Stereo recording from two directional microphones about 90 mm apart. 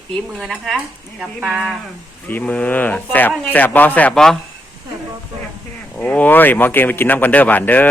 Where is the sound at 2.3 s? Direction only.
20° left (ahead or behind).